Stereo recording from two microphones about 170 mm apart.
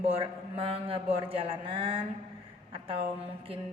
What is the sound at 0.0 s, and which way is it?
A woman's voice, 35° right (ahead or behind).